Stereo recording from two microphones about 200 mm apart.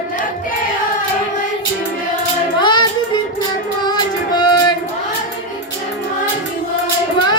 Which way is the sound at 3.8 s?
20° left (ahead or behind).